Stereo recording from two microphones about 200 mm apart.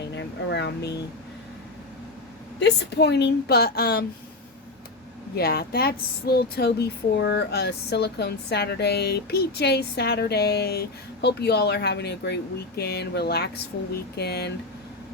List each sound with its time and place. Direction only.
0.2 s a sound: 60° left (ahead or behind)
2.6 s a woman's voice: 60° left (ahead or behind)
5.4 s a woman's voice: 50° left (ahead or behind)